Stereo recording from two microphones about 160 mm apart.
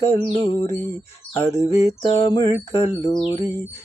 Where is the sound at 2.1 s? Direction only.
35° left (ahead or behind).